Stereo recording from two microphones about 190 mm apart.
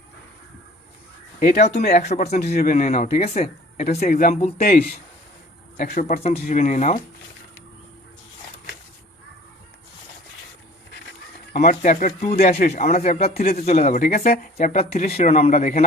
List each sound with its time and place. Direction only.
1.4 s speech: 40° left (ahead or behind)
2.3 s speech: 55° left (ahead or behind); by 3.8 s 35° left (ahead or behind)
3.8 s speech: 50° left (ahead or behind)
4.4 s speech: 35° left (ahead or behind)
5.7 s speech: 40° left (ahead or behind)
11.5 s speech: 45° left (ahead or behind)